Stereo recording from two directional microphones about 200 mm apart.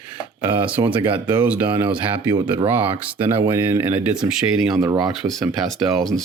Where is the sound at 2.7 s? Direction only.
10° right (ahead or behind).